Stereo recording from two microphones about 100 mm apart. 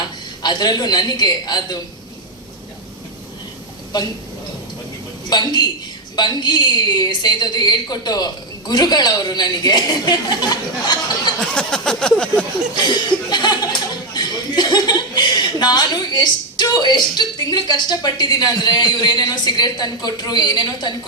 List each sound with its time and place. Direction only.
0.4 s speech: 40° left (ahead or behind)
3.9 s speech: 45° left (ahead or behind)
5.3 s speech: 45° left (ahead or behind)
11.5 s a sound: 5° left (ahead or behind)
12.7 s speech: 45° left (ahead or behind)